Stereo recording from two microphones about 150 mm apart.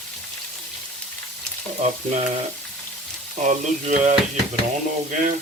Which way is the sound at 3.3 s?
50° right (ahead or behind).